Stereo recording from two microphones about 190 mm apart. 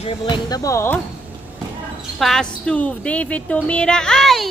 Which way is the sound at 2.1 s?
Centre (ahead or behind).